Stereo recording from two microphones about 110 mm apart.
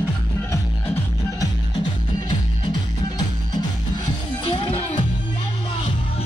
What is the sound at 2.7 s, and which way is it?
Music, 40° left (ahead or behind).